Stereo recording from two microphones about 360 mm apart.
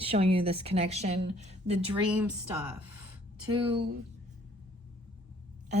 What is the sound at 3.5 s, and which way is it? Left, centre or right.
Speech, centre.